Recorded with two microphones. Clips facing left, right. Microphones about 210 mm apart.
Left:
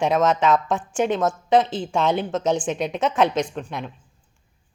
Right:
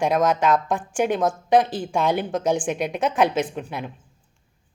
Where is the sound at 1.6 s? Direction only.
15° right (ahead or behind).